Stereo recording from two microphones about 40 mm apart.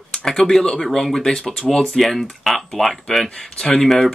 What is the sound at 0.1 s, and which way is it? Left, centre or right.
Speech, centre.